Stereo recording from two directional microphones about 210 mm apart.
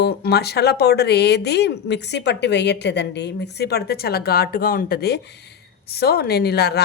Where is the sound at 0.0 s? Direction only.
50° left (ahead or behind).